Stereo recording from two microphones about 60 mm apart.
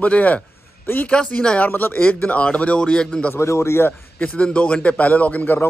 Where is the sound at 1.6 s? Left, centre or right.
Left; by 3.3 s centre.